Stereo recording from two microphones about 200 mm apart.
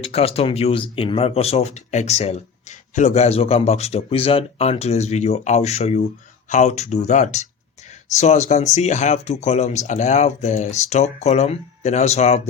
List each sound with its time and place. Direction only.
0.0 s speech: 30° left (ahead or behind)